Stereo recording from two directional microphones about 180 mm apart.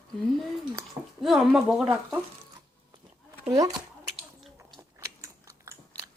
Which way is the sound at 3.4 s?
20° right (ahead or behind).